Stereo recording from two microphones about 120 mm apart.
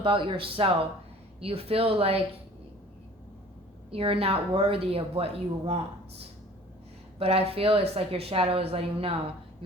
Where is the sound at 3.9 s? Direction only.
50° right (ahead or behind).